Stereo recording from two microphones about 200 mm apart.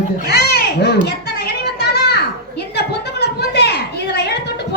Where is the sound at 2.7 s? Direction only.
55° left (ahead or behind).